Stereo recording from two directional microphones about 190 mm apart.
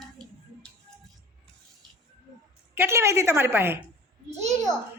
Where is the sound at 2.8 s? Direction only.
15° right (ahead or behind).